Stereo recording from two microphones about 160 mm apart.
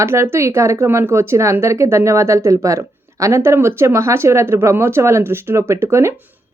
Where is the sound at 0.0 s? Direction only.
15° right (ahead or behind).